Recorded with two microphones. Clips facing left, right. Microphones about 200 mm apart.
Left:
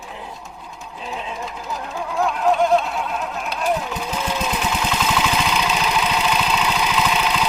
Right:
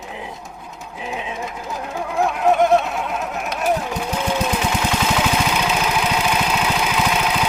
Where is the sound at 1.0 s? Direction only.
15° right (ahead or behind).